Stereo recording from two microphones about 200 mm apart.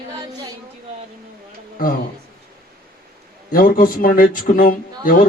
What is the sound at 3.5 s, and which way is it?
A man's voice, 45° left (ahead or behind).